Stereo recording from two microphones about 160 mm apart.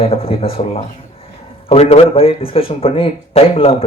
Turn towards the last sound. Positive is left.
turn(degrees=35)  # may be behind; listen again after turning